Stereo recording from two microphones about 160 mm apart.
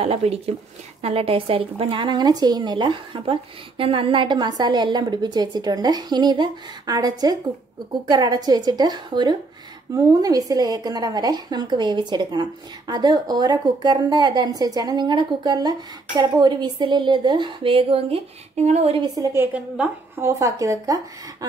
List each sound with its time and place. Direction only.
0.0 s speech: 40° right (ahead or behind)
19.1 s speech: 15° right (ahead or behind)